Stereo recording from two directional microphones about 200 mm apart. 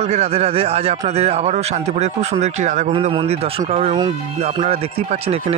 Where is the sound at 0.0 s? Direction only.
30° right (ahead or behind).